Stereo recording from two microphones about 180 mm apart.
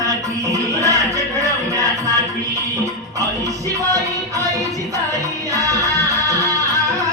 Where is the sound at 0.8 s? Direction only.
20° right (ahead or behind).